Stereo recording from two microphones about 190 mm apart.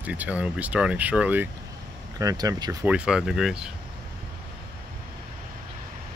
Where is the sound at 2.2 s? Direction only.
20° right (ahead or behind).